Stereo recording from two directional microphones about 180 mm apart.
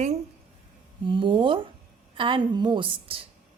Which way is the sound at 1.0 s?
25° right (ahead or behind).